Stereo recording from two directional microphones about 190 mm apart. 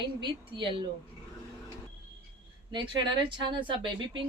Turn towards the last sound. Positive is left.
turn(degrees=-25)  # may be behind; listen again after turning